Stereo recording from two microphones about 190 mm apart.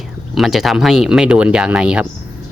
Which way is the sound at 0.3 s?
Centre (ahead or behind).